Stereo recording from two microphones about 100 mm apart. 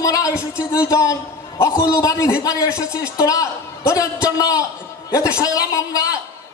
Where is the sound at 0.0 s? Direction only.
35° left (ahead or behind).